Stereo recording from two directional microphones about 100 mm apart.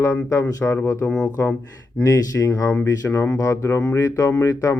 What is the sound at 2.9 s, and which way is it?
Speech, 25° left (ahead or behind).